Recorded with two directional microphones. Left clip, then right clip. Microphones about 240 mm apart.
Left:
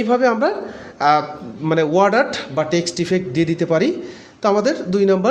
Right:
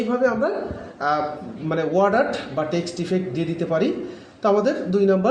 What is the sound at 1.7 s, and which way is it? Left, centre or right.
A man's voice, left.